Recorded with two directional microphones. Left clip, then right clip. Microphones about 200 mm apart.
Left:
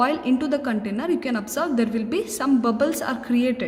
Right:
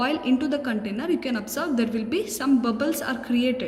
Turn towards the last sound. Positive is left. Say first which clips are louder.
# left 1 dB
turn(degrees=40)  # may be behind; listen again after turning